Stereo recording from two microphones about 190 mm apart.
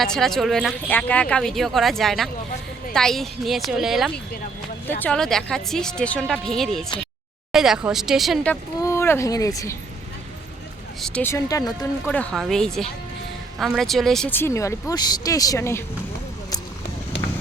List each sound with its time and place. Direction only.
0.0 s speech: centre (ahead or behind)
8.8 s speech: 15° left (ahead or behind)
11.0 s speech: 10° left (ahead or behind)
12.1 s speech: 5° left (ahead or behind)